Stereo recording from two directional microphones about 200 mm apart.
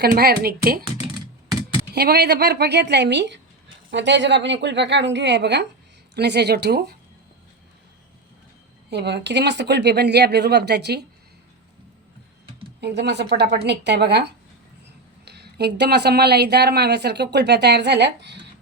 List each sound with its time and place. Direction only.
0.0 s speech: 50° right (ahead or behind)
2.0 s speech: 55° right (ahead or behind)
8.9 s speech: 60° right (ahead or behind)
12.8 s speech: 60° right (ahead or behind)